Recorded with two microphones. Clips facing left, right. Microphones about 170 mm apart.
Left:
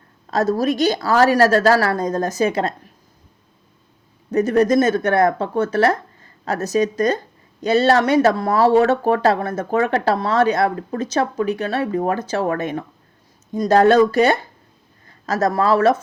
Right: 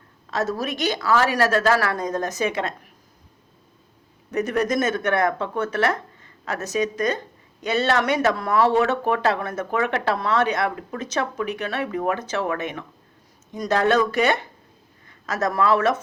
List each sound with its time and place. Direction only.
0.3 s speech: 40° left (ahead or behind)
4.3 s a woman's voice: 30° left (ahead or behind)